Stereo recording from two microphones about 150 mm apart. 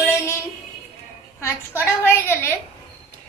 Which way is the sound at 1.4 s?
15° left (ahead or behind).